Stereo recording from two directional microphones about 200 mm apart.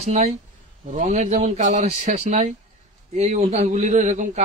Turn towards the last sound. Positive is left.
turn(degrees=-35)  # may be behind; listen again after turning